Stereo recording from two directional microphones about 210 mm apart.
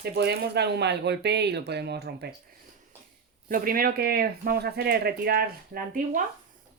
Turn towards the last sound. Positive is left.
turn(degrees=-40)  # may be behind; listen again after turning